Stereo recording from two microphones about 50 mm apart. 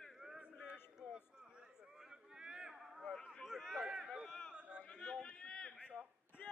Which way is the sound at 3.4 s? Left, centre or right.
Centre.